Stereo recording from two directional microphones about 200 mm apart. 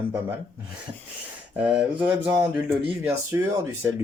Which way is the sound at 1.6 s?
5° right (ahead or behind).